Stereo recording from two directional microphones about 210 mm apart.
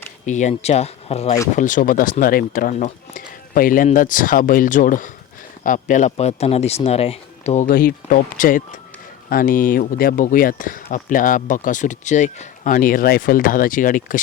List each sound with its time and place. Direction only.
0.3 s speech: 35° left (ahead or behind)